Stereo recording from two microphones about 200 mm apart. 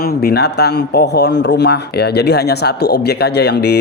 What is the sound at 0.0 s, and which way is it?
Speech, 50° left (ahead or behind).